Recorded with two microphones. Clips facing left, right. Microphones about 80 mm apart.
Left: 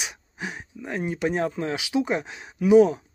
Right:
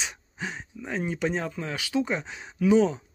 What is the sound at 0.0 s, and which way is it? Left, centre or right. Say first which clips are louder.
Speech: left 1 dB; centre.